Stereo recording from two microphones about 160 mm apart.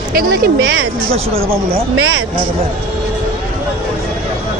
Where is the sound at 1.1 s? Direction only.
40° right (ahead or behind).